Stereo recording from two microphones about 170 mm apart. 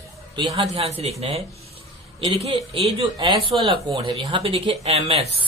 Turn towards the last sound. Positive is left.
turn(degrees=-35)  # may be behind; listen again after turning